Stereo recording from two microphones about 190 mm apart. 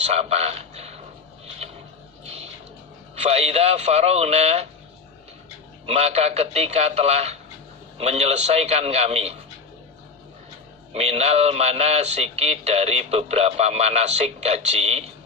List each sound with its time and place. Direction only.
0.0 s speech: 35° right (ahead or behind)
3.2 s a man's voice: 35° right (ahead or behind)
5.8 s a man's voice: 35° right (ahead or behind)
10.9 s a man's voice: 35° right (ahead or behind)